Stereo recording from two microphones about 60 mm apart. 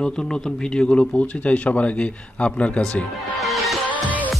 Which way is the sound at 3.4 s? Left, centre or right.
Centre.